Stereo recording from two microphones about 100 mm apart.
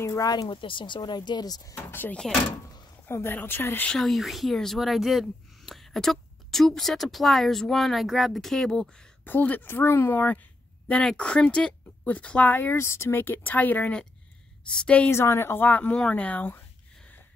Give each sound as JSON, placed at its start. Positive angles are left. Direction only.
{"t": 0.2, "sound": "speech", "side_deg": 40}
{"t": 1.9, "sound": "speech", "side_deg": 20}
{"t": 3.9, "sound": "speech", "side_deg": 0}
{"t": 9.2, "sound": "speech", "side_deg": 15}
{"t": 15.0, "sound": "speech", "side_deg": 25}